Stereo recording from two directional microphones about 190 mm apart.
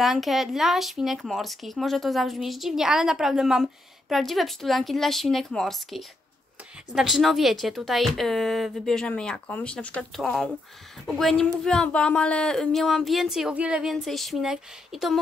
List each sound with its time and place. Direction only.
0.0 s speech: centre (ahead or behind)